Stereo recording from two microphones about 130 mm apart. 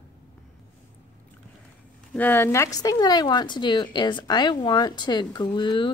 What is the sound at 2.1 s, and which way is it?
Speech, 15° left (ahead or behind).